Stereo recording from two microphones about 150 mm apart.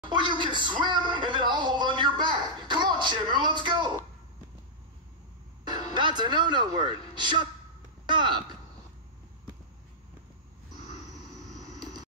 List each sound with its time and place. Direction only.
0.1 s speech: 30° right (ahead or behind)
5.9 s speech: 30° right (ahead or behind)